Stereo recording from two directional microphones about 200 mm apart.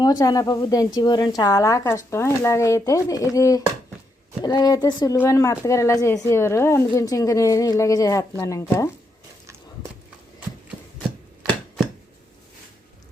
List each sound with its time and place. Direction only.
0.0 s a woman's voice: 20° left (ahead or behind)